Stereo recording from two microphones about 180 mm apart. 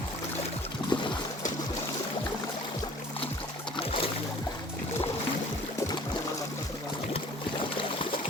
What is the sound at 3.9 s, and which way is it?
Boat, 30° left (ahead or behind).